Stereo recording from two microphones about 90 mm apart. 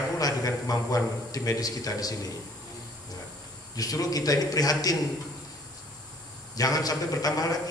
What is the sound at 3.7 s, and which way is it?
A man's voice, 45° left (ahead or behind).